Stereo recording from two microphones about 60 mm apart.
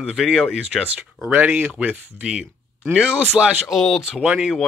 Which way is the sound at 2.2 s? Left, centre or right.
Centre.